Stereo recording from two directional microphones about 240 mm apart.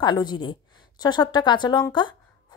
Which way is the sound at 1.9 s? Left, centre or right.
Centre.